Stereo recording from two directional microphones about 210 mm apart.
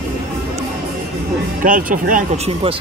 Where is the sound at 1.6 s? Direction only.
40° right (ahead or behind).